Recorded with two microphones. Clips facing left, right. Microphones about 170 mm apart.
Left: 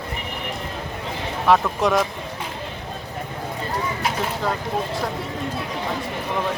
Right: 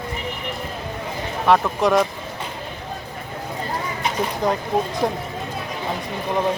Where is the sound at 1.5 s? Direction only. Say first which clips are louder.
Right 1 dB; centre (ahead or behind).